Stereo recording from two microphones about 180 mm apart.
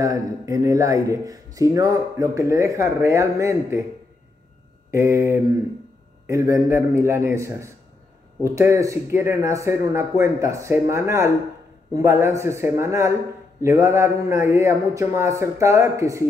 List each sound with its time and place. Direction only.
0.0 s speech: 20° right (ahead or behind)
4.9 s speech: 15° right (ahead or behind)